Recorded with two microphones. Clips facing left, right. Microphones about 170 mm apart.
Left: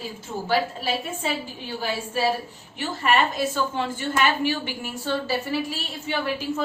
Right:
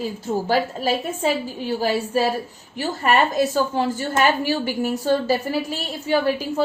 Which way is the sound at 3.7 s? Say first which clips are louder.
Right 4 dB; 40° right (ahead or behind).